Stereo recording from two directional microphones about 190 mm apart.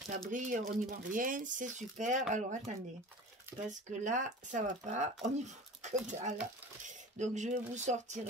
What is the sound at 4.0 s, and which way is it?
Speech, 40° right (ahead or behind).